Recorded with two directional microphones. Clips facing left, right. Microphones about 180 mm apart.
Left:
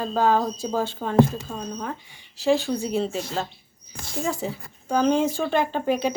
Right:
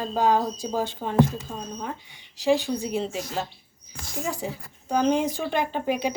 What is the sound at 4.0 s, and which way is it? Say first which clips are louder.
Speech: left 3 dB; 30° left (ahead or behind).